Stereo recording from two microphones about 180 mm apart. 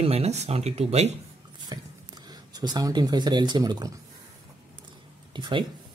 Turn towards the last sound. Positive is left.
turn(degrees=-25)  # may be behind; listen again after turning